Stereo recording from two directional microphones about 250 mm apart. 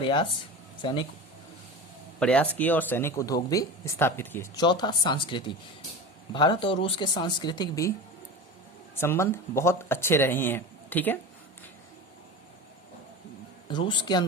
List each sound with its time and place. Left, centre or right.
0.0 s a man's voice: centre
2.1 s speech: centre
9.0 s speech: centre
13.7 s a man's voice: centre